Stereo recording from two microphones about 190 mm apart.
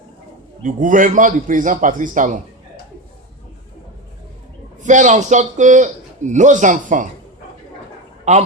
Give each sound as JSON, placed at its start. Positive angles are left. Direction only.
{"t": 0.6, "sound": "a man's voice", "side_deg": -45}
{"t": 4.8, "sound": "a man's voice", "side_deg": -40}
{"t": 8.2, "sound": "a man's voice", "side_deg": -35}